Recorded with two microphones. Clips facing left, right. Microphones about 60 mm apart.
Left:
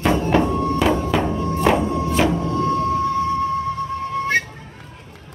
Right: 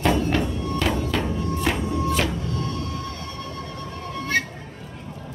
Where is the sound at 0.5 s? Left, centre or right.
Left.